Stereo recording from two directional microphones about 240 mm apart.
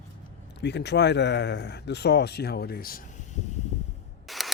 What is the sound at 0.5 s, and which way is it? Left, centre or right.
Speech, left.